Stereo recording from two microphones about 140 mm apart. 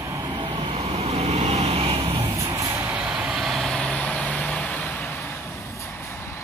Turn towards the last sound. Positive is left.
turn(degrees=10)  # may be behind; listen again after turning